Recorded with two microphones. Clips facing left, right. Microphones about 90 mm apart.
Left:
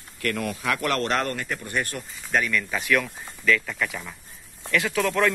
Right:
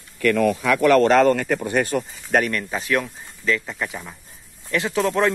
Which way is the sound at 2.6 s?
30° right (ahead or behind).